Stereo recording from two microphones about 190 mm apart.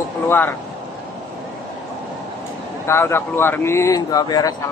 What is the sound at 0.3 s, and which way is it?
Speech, 10° left (ahead or behind).